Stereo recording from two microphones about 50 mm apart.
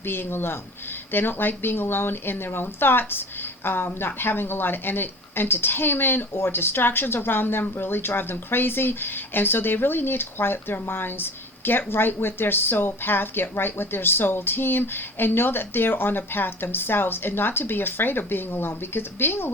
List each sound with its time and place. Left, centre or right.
0.0 s speech: left